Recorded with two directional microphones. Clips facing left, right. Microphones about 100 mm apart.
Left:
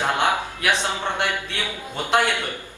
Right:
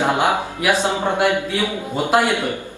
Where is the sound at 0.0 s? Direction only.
20° right (ahead or behind).